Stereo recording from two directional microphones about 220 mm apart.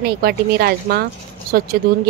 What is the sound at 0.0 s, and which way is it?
A woman's voice, 45° right (ahead or behind).